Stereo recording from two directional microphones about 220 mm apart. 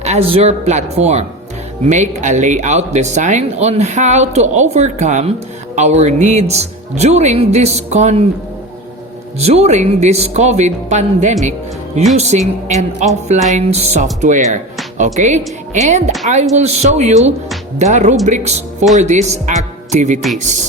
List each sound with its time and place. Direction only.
0.0 s speech: 30° right (ahead or behind)
9.4 s speech: 30° right (ahead or behind)